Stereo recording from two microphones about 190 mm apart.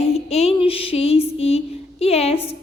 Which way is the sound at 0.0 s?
35° left (ahead or behind).